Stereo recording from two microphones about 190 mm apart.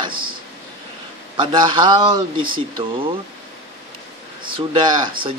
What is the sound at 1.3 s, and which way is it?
Speech, 25° right (ahead or behind).